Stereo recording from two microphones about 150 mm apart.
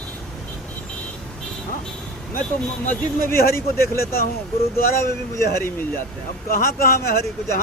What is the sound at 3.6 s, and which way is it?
Speech, 15° left (ahead or behind).